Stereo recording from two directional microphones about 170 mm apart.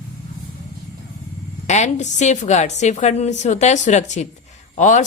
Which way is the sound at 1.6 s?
45° left (ahead or behind).